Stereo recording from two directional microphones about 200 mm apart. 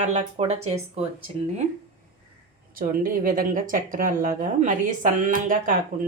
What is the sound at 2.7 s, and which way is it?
Speech, 45° right (ahead or behind).